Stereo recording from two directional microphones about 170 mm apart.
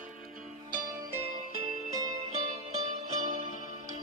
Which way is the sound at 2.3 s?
40° right (ahead or behind).